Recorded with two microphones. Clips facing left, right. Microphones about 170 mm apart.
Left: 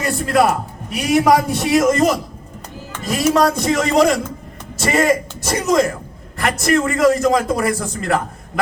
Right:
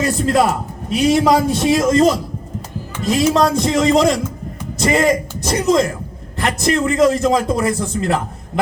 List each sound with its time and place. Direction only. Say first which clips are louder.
0.0 s a man's voice: right 1 dB; 20° right (ahead or behind)
5.5 s a man's voice: right 1 dB; 20° right (ahead or behind)